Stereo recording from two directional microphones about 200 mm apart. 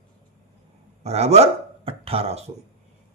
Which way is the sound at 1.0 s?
30° right (ahead or behind).